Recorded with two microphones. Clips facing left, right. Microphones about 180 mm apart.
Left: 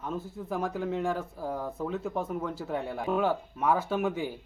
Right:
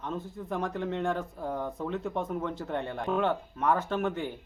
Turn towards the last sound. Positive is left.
turn(degrees=5)  # may be behind; listen again after turning